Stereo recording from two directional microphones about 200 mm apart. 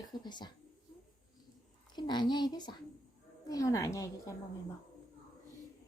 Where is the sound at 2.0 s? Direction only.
20° left (ahead or behind).